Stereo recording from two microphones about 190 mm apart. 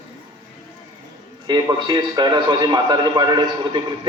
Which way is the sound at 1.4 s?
25° right (ahead or behind).